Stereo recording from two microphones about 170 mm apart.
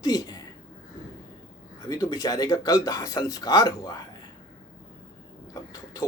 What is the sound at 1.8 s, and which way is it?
Speech, 20° left (ahead or behind).